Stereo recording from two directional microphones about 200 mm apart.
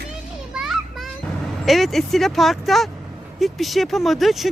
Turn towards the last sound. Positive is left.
turn(degrees=0)  # may be behind; listen again after turning